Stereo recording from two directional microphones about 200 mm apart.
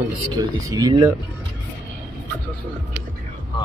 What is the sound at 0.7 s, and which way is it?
Speech, 20° right (ahead or behind).